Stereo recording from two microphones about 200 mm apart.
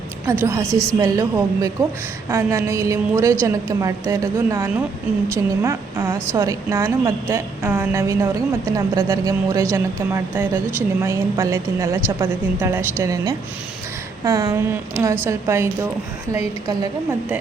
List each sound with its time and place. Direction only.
0.3 s a woman's voice: 15° right (ahead or behind)
0.7 s a woman's voice: centre (ahead or behind)
1.0 s a woman's voice: 15° right (ahead or behind)